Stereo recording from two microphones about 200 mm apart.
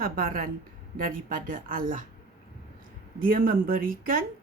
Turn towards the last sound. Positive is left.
turn(degrees=-45)  # may be behind; listen again after turning